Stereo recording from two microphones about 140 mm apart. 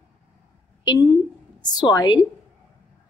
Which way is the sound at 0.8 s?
30° left (ahead or behind).